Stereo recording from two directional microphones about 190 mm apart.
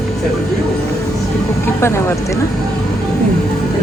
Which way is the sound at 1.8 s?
15° left (ahead or behind).